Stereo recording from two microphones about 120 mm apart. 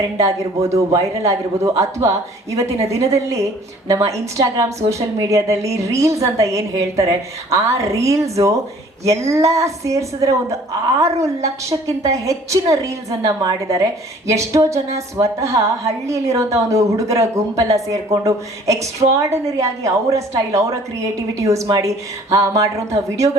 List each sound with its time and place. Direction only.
0.2 s a woman's voice: 25° right (ahead or behind)
11.4 s a woman's voice: 25° right (ahead or behind)